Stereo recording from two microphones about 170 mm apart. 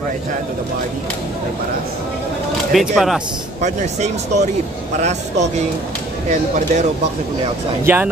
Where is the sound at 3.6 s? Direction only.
45° right (ahead or behind).